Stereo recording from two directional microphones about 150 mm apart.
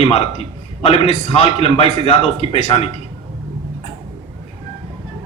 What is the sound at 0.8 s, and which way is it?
A man's voice, 40° left (ahead or behind).